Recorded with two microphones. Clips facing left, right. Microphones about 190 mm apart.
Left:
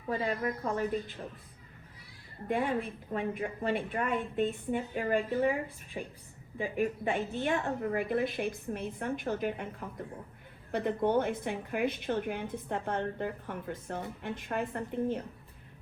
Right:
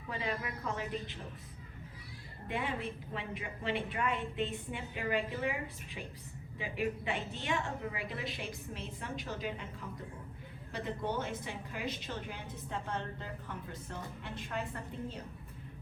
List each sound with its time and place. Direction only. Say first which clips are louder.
0.1 s a woman's voice: left 7 dB; 45° left (ahead or behind)
3.1 s a woman's voice: left 8 dB; 50° left (ahead or behind)
10.7 s a woman's voice: left 8 dB; 55° left (ahead or behind)